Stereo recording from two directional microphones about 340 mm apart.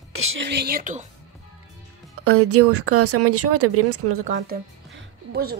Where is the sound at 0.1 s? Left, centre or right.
Right.